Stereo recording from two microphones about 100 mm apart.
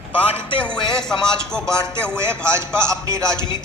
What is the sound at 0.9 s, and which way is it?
Speech, 5° left (ahead or behind).